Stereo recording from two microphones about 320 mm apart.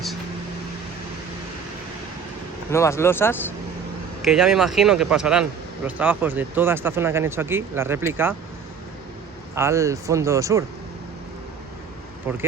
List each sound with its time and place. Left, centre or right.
2.6 s a man's voice: centre
9.6 s speech: centre